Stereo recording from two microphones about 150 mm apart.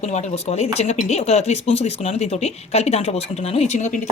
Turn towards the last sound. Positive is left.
turn(degrees=50)  # may be behind; listen again after turning